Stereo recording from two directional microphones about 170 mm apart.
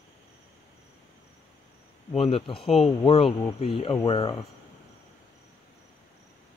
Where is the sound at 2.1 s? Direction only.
35° left (ahead or behind).